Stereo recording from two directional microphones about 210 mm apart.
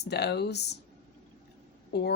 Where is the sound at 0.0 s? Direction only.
50° left (ahead or behind).